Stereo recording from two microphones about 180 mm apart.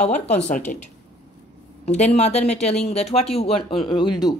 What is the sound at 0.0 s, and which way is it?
Speech, 40° left (ahead or behind).